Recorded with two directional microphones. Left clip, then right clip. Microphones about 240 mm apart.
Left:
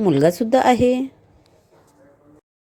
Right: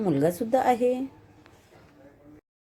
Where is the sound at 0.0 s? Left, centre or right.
Left.